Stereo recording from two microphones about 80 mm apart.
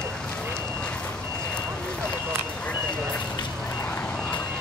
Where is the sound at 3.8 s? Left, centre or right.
Centre.